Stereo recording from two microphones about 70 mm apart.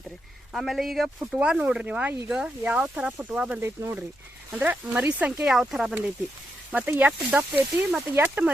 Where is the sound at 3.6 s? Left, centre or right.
Right.